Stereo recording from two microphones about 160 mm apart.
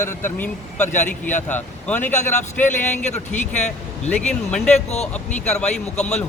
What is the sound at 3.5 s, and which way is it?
Speech, 45° left (ahead or behind).